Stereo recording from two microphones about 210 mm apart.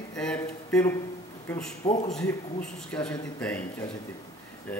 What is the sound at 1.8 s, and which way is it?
Speech, 30° left (ahead or behind).